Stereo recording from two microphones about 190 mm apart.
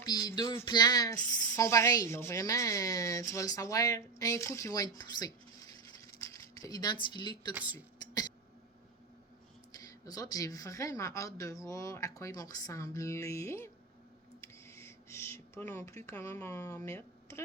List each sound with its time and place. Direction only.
0.0 s speech: 20° left (ahead or behind)
6.0 s a sound: 15° left (ahead or behind)
7.0 s speech: 25° left (ahead or behind)
7.5 s speech: 10° right (ahead or behind)
9.7 s speech: 20° left (ahead or behind)
14.4 s a sound: 15° left (ahead or behind)